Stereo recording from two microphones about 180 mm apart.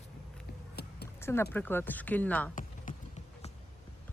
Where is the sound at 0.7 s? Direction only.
65° left (ahead or behind).